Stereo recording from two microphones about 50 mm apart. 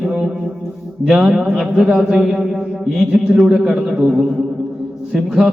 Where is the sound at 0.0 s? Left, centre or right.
Centre.